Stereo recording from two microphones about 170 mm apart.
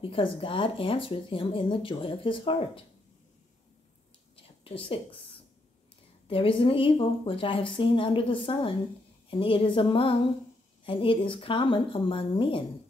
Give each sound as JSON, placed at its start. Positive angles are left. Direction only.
{"t": 0.0, "sound": "speech", "side_deg": 30}
{"t": 4.4, "sound": "a sound", "side_deg": 35}
{"t": 6.2, "sound": "speech", "side_deg": 30}